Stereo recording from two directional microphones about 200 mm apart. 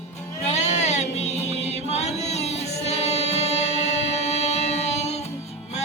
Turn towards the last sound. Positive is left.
turn(degrees=35)  # may be behind; listen again after turning